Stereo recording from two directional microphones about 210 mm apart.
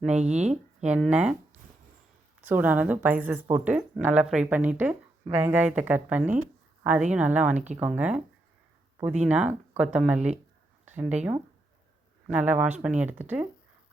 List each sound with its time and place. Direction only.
0.2 s speech: 35° right (ahead or behind)
0.9 s speech: 5° right (ahead or behind)
2.4 s speech: 10° right (ahead or behind)
9.2 s speech: 5° right (ahead or behind)